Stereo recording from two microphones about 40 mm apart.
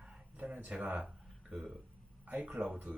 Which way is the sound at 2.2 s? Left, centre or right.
Right.